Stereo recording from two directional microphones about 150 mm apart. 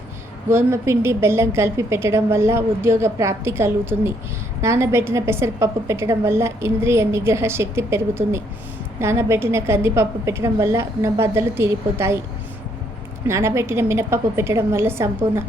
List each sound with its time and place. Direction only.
0.5 s a woman's voice: 15° right (ahead or behind)
13.2 s a woman's voice: 20° right (ahead or behind)